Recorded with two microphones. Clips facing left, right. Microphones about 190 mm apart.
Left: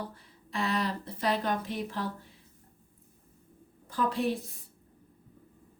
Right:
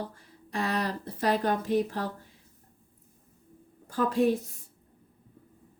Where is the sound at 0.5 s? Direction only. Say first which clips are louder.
Right 1 dB; 45° right (ahead or behind).